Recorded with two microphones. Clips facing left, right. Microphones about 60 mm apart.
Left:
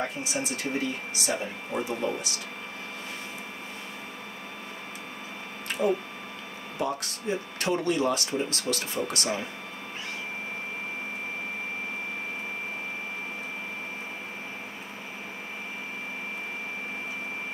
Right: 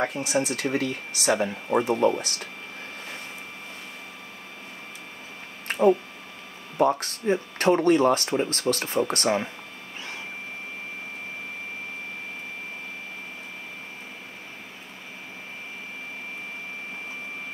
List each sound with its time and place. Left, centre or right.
0.0 s speech: right
1.9 s speech: right
5.7 s a sound: right
6.8 s speech: right